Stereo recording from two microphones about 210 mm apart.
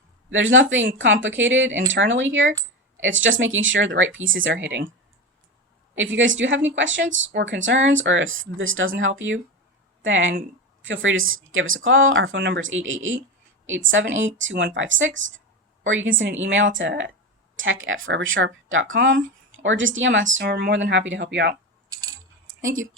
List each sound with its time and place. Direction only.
0.3 s speech: 65° right (ahead or behind)
5.9 s speech: 65° right (ahead or behind)
22.4 s a sound: 70° right (ahead or behind)